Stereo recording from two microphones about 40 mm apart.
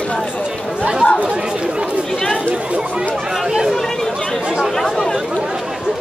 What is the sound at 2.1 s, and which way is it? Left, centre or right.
Chatter, centre.